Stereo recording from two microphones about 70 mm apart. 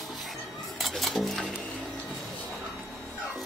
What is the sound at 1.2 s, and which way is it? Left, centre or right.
Music, centre.